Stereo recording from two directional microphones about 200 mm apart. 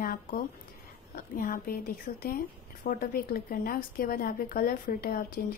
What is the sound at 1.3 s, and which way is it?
A woman's voice, 45° left (ahead or behind).